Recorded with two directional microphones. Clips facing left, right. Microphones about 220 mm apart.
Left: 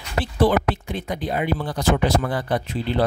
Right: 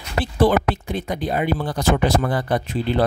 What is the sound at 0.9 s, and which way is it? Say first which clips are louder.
Speech: right 2 dB; 40° right (ahead or behind).